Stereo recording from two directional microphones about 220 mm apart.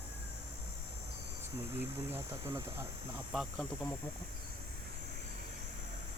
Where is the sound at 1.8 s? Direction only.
10° right (ahead or behind).